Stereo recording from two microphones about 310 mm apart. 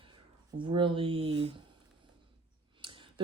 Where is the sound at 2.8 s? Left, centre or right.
Centre.